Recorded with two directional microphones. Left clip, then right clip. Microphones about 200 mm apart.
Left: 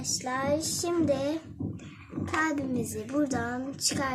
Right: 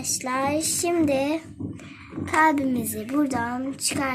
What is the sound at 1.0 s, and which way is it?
Child singing, 25° right (ahead or behind).